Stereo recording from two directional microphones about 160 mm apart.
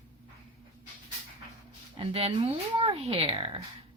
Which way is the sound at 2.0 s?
35° right (ahead or behind).